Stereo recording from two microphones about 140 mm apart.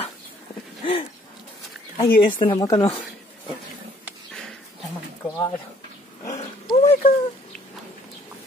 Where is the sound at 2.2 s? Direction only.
35° left (ahead or behind).